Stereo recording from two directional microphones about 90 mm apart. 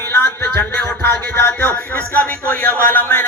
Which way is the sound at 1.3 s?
20° left (ahead or behind).